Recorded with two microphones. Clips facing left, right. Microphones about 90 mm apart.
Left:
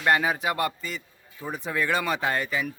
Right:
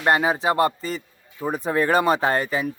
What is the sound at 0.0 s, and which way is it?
A man's voice, 25° right (ahead or behind).